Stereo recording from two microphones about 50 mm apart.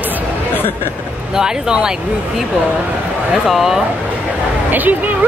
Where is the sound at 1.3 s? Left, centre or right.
Centre.